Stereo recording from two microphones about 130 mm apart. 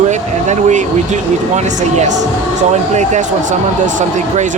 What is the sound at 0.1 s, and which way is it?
Speech, 65° right (ahead or behind).